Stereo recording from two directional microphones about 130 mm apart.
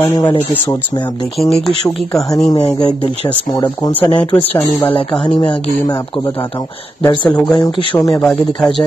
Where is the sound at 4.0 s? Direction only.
45° left (ahead or behind).